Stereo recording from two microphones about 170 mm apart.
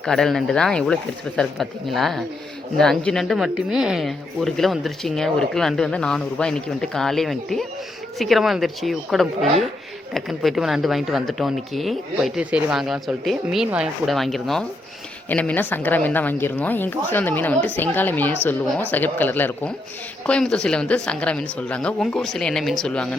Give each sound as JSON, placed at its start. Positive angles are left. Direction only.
{"t": 0.0, "sound": "a woman's voice", "side_deg": 5}